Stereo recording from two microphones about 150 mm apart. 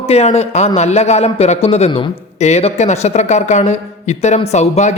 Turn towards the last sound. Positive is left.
turn(degrees=50)  # may be behind; listen again after turning